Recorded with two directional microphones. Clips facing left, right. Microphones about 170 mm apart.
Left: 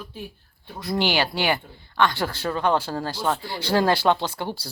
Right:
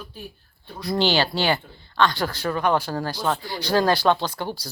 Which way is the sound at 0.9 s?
15° left (ahead or behind).